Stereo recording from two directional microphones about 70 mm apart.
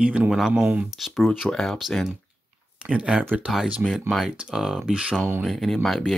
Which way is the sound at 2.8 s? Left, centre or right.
Centre.